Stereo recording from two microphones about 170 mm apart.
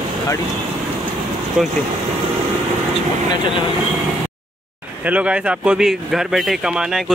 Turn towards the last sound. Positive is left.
turn(degrees=0)  # may be behind; listen again after turning